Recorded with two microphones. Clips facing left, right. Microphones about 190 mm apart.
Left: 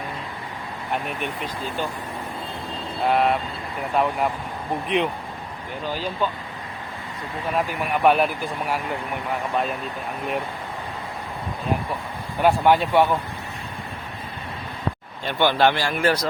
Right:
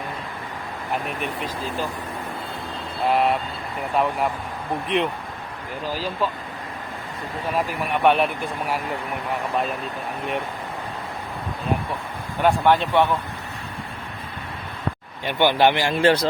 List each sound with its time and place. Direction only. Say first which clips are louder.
1.0 s speech: right 1 dB; centre (ahead or behind)
3.0 s speech: even; centre (ahead or behind)
7.5 s speech: even; centre (ahead or behind)
12.4 s speech: left 1 dB; 10° left (ahead or behind)
15.2 s speech: right 1 dB; 15° right (ahead or behind)